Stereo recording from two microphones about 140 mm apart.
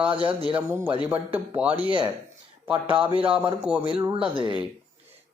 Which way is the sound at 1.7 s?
30° left (ahead or behind).